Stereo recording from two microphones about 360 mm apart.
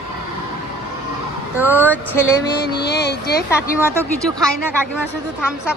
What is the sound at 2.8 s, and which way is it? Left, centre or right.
Speech, left.